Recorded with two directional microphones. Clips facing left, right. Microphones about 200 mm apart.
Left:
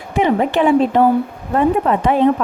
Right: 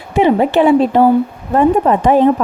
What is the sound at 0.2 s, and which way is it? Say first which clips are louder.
Speech: right 4 dB; 30° right (ahead or behind).